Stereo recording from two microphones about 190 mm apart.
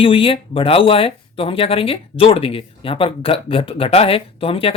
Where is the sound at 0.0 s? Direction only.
30° left (ahead or behind).